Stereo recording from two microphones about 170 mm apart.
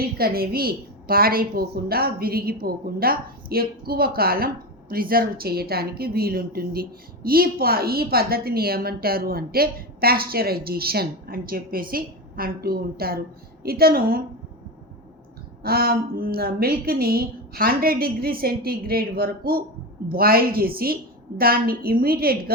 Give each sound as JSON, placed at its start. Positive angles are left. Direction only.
{"t": 0.0, "sound": "a woman's voice", "side_deg": -60}
{"t": 15.6, "sound": "a woman's voice", "side_deg": -60}